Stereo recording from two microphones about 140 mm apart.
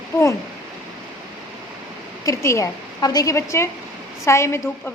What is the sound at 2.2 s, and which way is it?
A woman's voice, 20° left (ahead or behind).